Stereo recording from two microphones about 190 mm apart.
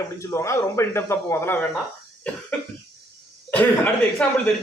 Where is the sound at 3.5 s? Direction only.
10° left (ahead or behind).